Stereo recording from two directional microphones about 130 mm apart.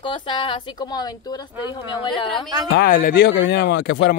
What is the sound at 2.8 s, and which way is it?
Speech, 90° left.